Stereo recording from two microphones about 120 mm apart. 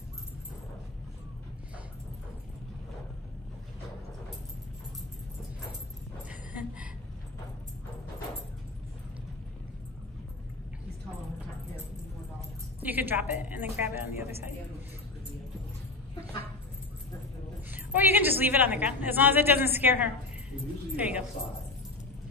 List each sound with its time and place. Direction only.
6.2 s a sound: 10° right (ahead or behind)
12.8 s a woman's voice: 15° right (ahead or behind)
17.6 s a woman's voice: 15° right (ahead or behind)